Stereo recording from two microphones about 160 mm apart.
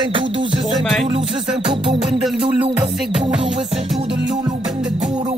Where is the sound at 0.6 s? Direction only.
Centre (ahead or behind).